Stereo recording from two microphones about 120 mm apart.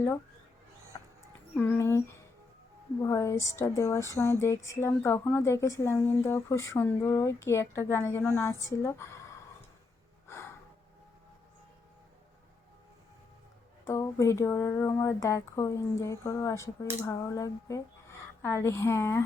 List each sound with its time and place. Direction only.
1.8 s a woman's voice: 25° left (ahead or behind)
10.2 s gasp: 20° left (ahead or behind)
13.8 s a woman's voice: 25° left (ahead or behind)